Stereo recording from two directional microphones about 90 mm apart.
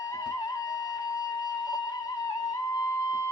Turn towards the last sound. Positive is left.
turn(degrees=40)  # may be behind; listen again after turning